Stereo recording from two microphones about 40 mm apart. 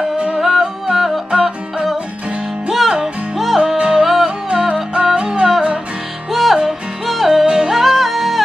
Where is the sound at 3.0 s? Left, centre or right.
Centre.